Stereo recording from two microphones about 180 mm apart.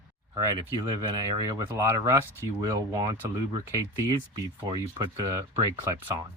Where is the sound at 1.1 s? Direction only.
20° right (ahead or behind).